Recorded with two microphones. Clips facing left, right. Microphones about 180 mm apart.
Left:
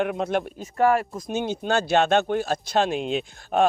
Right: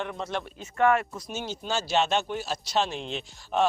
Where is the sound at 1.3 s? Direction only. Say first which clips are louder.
Left 8 dB; 60° left (ahead or behind).